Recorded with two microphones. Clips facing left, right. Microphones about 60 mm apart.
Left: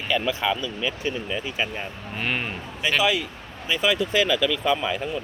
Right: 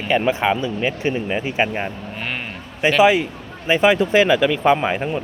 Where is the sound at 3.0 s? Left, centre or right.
Right.